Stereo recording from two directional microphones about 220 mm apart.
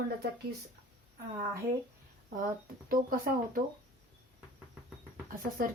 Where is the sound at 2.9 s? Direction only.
40° right (ahead or behind).